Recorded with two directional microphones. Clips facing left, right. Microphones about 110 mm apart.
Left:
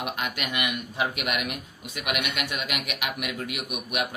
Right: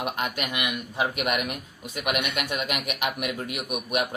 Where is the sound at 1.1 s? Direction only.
40° right (ahead or behind).